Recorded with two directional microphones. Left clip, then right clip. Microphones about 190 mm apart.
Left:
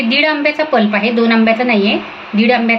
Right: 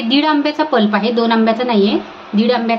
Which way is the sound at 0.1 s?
50° right (ahead or behind).